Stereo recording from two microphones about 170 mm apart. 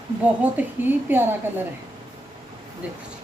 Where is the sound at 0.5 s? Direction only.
10° right (ahead or behind).